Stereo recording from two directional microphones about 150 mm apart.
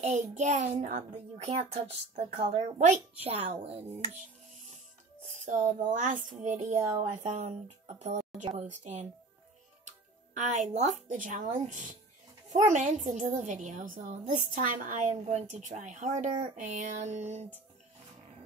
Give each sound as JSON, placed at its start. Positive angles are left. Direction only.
{"t": 0.0, "sound": "a child's voice", "side_deg": -55}
{"t": 3.3, "sound": "speech", "side_deg": -40}
{"t": 5.5, "sound": "a woman's voice", "side_deg": -60}